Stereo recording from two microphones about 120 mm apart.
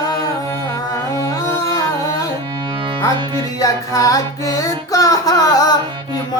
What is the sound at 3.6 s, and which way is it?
Music, 30° left (ahead or behind).